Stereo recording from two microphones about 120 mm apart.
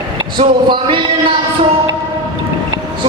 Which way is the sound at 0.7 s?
45° right (ahead or behind).